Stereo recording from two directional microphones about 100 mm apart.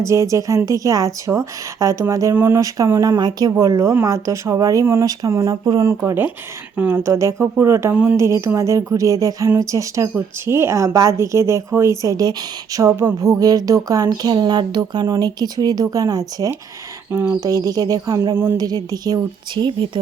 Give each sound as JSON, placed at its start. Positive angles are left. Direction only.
{"t": 0.0, "sound": "speech", "side_deg": -30}
{"t": 6.7, "sound": "speech", "side_deg": -20}
{"t": 12.8, "sound": "speech", "side_deg": -30}
{"t": 17.1, "sound": "speech", "side_deg": -25}
{"t": 17.4, "sound": "a woman's voice", "side_deg": -35}